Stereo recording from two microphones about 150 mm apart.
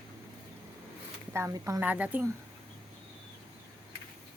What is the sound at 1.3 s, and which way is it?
Speech, 20° right (ahead or behind).